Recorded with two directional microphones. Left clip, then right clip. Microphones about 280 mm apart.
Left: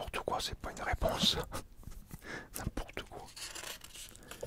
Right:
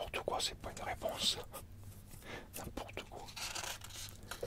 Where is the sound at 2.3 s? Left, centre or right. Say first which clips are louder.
Left 4 dB; left.